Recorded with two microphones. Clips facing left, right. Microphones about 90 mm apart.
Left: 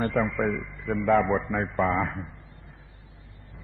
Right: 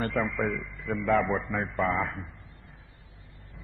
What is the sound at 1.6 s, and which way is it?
Speech, 15° left (ahead or behind).